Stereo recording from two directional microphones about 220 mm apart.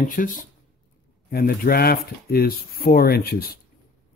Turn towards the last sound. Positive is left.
turn(degrees=45)  # may be behind; listen again after turning